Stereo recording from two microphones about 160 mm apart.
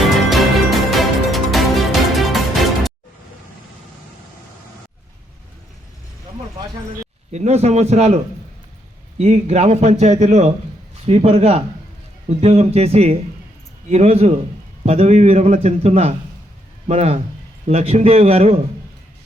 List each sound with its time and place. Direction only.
0.3 s music: centre (ahead or behind)
7.3 s a man's voice: 45° right (ahead or behind)